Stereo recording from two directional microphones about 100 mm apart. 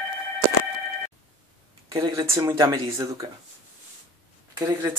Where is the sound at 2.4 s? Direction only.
45° right (ahead or behind).